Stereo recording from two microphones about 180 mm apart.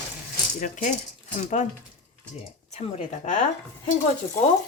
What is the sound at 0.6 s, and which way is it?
Speech, 45° left (ahead or behind).